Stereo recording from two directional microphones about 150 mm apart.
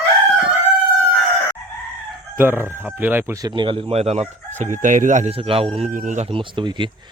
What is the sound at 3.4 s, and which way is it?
Chicken, 30° right (ahead or behind).